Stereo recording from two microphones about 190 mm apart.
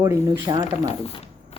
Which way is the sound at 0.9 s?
30° left (ahead or behind).